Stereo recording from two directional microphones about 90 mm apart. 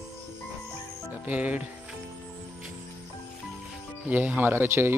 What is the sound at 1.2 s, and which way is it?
Speech, 15° right (ahead or behind).